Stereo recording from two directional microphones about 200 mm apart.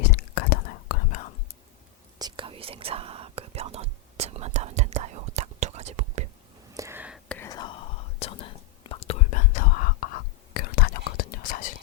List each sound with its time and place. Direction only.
0.1 s whispering: 45° left (ahead or behind)
2.1 s whispering: 20° right (ahead or behind)
6.7 s whispering: 10° right (ahead or behind)
7.3 s whispering: 10° left (ahead or behind); by 11.7 s 45° left (ahead or behind)